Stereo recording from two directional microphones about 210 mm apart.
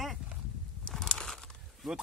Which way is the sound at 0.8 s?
5° left (ahead or behind).